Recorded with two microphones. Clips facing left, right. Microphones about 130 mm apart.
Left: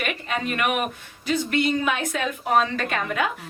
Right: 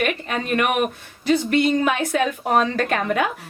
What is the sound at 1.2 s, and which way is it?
A woman's voice, 40° right (ahead or behind).